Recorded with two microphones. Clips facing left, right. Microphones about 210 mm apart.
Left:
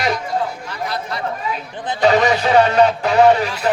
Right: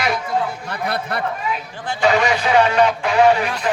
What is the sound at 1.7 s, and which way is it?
Speech, 20° left (ahead or behind).